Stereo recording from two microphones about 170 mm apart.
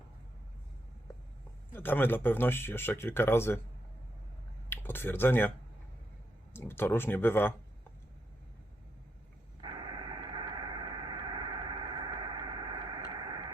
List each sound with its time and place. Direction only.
1.7 s speech: 10° left (ahead or behind)
4.7 s speech: 10° left (ahead or behind)
6.5 s speech: 15° left (ahead or behind)
9.6 s radio: 25° right (ahead or behind)
13.1 s a sound: 25° right (ahead or behind)